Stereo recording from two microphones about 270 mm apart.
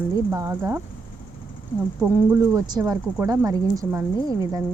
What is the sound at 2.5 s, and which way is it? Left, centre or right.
Speech, centre.